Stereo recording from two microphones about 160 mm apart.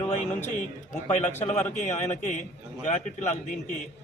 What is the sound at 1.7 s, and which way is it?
Speech, 50° left (ahead or behind).